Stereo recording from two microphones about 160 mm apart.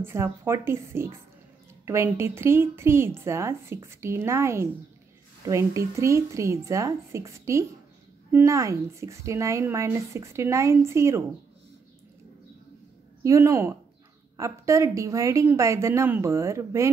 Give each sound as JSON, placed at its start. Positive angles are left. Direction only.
{"t": 0.0, "sound": "speech", "side_deg": -15}
{"t": 13.2, "sound": "speech", "side_deg": -20}